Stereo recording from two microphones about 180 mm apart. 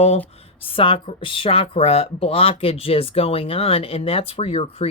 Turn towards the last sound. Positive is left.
turn(degrees=35)  # may be behind; listen again after turning